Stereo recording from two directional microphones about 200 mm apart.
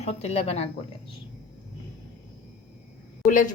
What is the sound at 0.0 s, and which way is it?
Speech, 30° left (ahead or behind).